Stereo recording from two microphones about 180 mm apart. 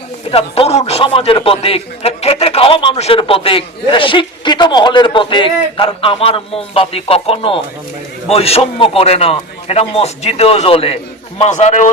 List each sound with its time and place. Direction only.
0.3 s a man's voice: 30° left (ahead or behind)